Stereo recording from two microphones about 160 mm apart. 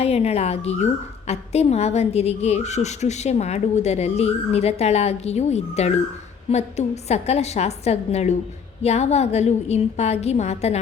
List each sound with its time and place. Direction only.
0.0 s a woman's voice: 40° left (ahead or behind)